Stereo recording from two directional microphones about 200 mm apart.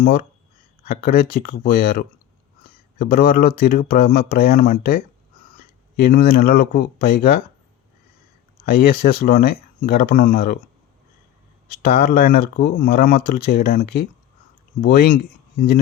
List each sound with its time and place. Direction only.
0.9 s speech: 50° left (ahead or behind)
8.6 s speech: 50° left (ahead or behind)
11.7 s speech: 50° left (ahead or behind)